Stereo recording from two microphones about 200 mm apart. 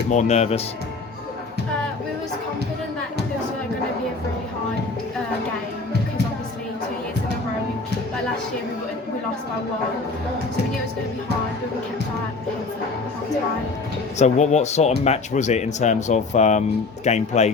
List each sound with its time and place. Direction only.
0.1 s speech: 35° left (ahead or behind)
14.2 s speech: 35° left (ahead or behind)